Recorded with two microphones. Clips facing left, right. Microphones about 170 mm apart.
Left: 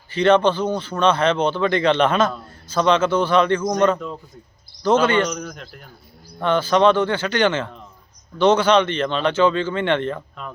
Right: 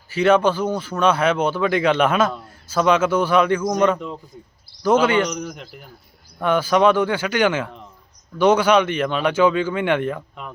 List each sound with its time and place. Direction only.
0.1 s speech: 5° right (ahead or behind)